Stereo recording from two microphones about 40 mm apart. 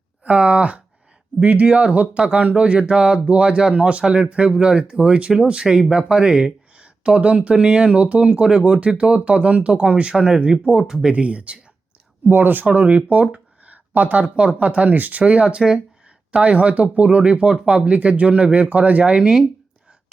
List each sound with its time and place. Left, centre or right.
0.3 s speech: right; by 6.5 s centre
6.7 s speech: right
10.7 s speech: centre
11.1 s speech: right
12.3 s speech: right
12.7 s speech: right
13.3 s a sound: right
14.6 s speech: right
15.2 s speech: right
16.4 s speech: right